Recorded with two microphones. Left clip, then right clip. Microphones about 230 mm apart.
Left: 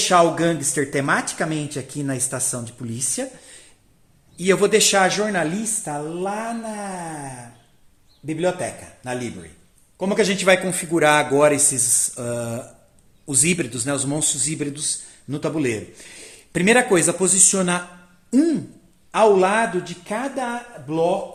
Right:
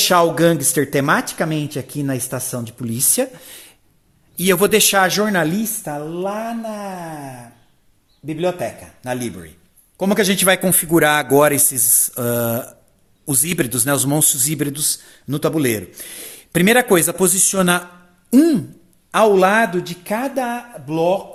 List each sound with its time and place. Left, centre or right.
0.0 s a man's voice: right